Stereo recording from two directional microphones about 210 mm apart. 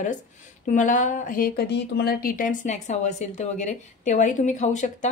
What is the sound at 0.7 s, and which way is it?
Speech, 35° left (ahead or behind).